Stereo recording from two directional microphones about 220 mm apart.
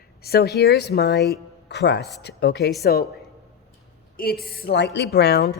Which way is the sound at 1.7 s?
50° left (ahead or behind).